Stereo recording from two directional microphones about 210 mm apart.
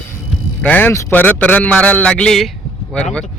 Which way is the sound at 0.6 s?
10° left (ahead or behind).